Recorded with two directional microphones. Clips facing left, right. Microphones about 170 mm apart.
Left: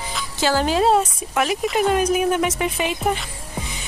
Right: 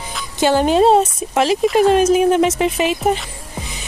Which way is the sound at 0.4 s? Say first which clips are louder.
Right 6 dB; 20° right (ahead or behind).